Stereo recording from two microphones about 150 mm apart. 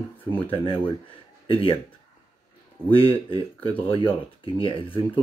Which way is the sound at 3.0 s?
35° left (ahead or behind).